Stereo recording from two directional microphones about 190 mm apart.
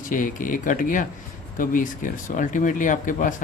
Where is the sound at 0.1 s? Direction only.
45° left (ahead or behind).